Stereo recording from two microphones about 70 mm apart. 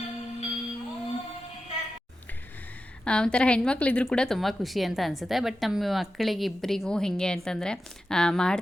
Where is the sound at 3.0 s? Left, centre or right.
Centre.